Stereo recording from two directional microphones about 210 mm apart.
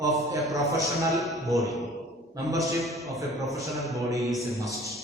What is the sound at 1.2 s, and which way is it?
Speech, centre (ahead or behind).